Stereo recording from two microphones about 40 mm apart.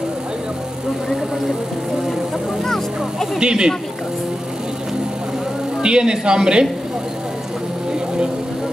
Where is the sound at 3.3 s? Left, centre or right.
Right.